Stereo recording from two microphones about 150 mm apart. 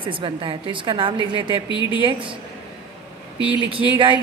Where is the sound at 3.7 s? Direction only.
35° right (ahead or behind).